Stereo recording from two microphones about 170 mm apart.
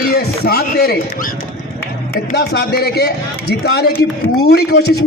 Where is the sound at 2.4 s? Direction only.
70° left (ahead or behind).